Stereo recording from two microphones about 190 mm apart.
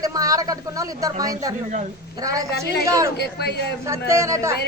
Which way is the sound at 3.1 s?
60° left (ahead or behind).